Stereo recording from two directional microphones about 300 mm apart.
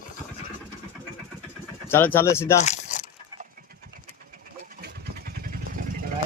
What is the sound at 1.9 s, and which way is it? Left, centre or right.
Speech, centre.